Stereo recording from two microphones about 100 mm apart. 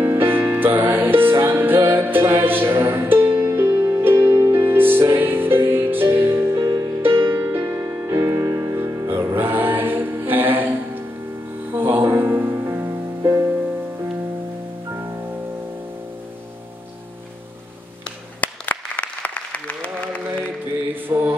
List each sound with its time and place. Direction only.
0.0 s music: 20° right (ahead or behind)
6.6 s music: 35° right (ahead or behind)
7.3 s music: 25° right (ahead or behind)
18.0 s applause: 15° left (ahead or behind)
20.9 s mantra: 20° right (ahead or behind)